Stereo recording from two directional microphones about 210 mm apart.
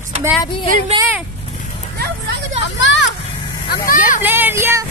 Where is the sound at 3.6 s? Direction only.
45° left (ahead or behind).